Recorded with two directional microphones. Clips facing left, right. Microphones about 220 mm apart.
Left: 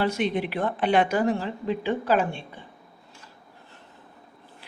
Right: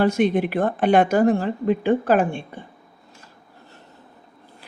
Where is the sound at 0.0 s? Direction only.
45° right (ahead or behind).